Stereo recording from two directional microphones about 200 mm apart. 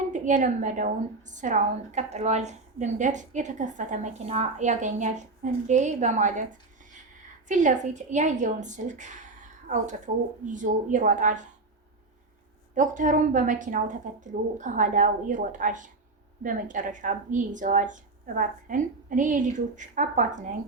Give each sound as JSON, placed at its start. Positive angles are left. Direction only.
{"t": 0.1, "sound": "a woman's voice", "side_deg": -40}
{"t": 7.4, "sound": "a woman's voice", "side_deg": -40}
{"t": 12.7, "sound": "a woman's voice", "side_deg": -40}